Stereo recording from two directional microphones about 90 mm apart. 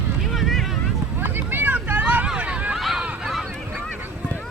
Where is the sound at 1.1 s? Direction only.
25° right (ahead or behind).